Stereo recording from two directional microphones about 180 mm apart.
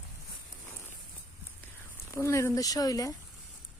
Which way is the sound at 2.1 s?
15° left (ahead or behind).